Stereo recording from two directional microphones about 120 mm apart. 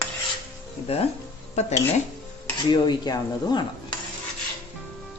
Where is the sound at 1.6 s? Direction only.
70° left (ahead or behind).